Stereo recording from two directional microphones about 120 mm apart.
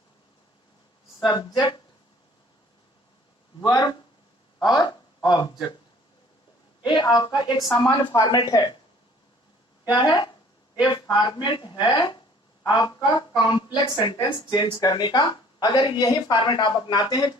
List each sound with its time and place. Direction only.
1.2 s a woman's voice: 35° left (ahead or behind)
3.6 s a woman's voice: 35° left (ahead or behind)
4.8 s a sound: 35° left (ahead or behind)
6.8 s a woman's voice: 40° left (ahead or behind)
9.8 s a woman's voice: 40° left (ahead or behind)